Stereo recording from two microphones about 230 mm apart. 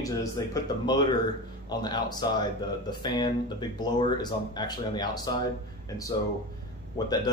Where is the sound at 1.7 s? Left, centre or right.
Centre.